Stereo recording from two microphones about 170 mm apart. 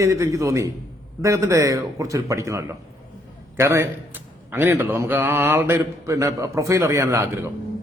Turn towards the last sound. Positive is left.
turn(degrees=-15)  # may be behind; listen again after turning